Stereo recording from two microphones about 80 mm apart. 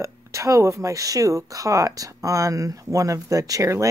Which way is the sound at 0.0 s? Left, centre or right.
Right.